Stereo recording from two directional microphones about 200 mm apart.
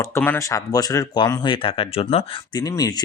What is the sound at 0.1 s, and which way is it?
Speech, 10° left (ahead or behind).